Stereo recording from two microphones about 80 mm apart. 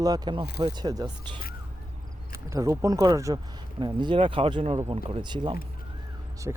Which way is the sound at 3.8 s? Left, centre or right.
Right.